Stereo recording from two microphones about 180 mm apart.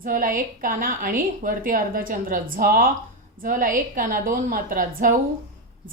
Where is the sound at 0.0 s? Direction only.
50° right (ahead or behind).